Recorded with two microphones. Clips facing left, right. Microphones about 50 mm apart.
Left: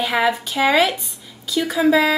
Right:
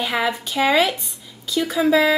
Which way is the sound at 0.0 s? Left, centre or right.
Centre.